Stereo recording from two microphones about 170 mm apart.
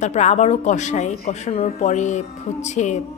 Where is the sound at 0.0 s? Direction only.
40° left (ahead or behind).